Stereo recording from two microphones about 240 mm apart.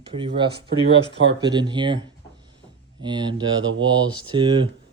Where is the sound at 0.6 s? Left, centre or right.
Right.